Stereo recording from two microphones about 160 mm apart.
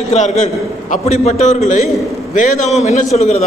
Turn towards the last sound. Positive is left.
turn(degrees=45)  # may be behind; listen again after turning